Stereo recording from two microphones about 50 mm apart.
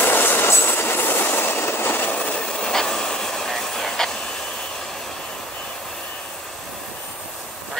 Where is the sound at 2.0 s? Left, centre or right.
Left; by 5.1 s centre.